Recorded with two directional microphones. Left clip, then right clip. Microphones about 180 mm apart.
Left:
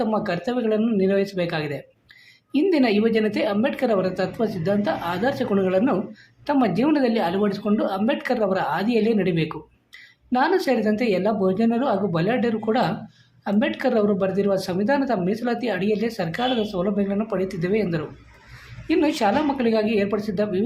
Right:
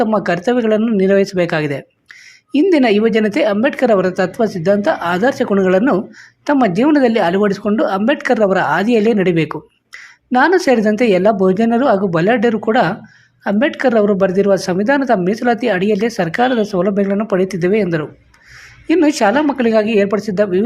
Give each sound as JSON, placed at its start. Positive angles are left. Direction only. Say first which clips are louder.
{"t": 0.0, "sound": "speech", "louder": "right 9 dB", "side_deg": -40}